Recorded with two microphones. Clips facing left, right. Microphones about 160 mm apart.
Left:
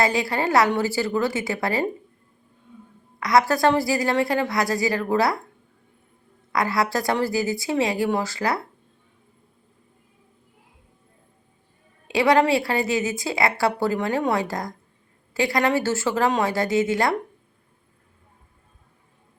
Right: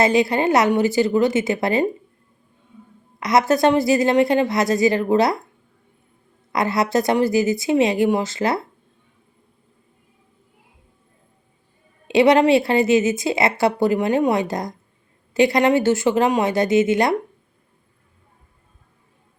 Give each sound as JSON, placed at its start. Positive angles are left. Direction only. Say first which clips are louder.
{"t": 0.0, "sound": "a woman's voice", "louder": "right 5 dB", "side_deg": -20}
{"t": 3.2, "sound": "a woman's voice", "louder": "right 2 dB", "side_deg": -20}
{"t": 6.5, "sound": "a woman's voice", "louder": "right 3 dB", "side_deg": -20}
{"t": 12.0, "sound": "a woman's voice", "louder": "right 4 dB", "side_deg": -20}